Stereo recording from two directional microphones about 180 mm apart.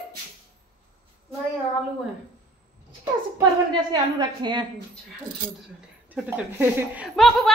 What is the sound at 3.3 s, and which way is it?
A woman's voice, 25° right (ahead or behind).